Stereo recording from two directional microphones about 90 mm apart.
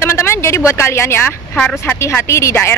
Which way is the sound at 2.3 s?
35° left (ahead or behind).